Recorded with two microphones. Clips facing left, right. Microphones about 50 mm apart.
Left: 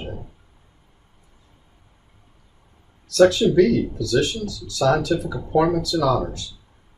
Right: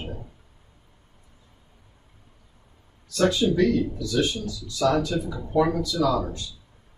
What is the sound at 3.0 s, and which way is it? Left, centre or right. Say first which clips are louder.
Speech: left 6 dB; left.